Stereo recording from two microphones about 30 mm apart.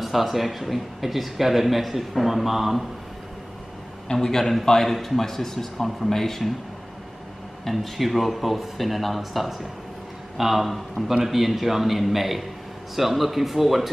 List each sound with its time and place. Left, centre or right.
0.0 s speech: centre
4.1 s speech: centre
4.8 s speech: centre
7.6 s speech: centre